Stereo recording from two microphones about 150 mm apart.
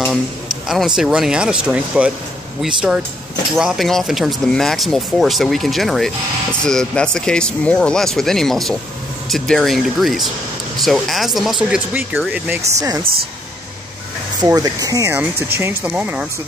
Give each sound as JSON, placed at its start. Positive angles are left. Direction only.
{"t": 0.7, "sound": "speech", "side_deg": -5}
{"t": 13.0, "sound": "speech", "side_deg": -90}
{"t": 14.4, "sound": "speech", "side_deg": -25}